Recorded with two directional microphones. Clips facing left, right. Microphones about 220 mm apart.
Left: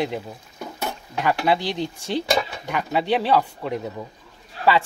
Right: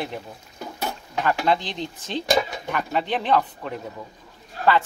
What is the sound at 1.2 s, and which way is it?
Speech, 10° left (ahead or behind).